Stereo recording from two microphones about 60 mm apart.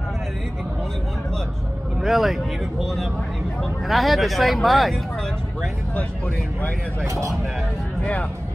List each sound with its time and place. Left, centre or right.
2.0 s speech: centre
5.9 s speech: left
8.0 s speech: left